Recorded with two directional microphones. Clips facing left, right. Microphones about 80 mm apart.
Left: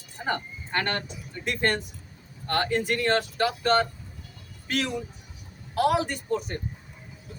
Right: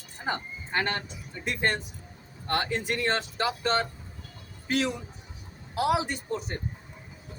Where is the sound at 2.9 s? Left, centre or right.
Right.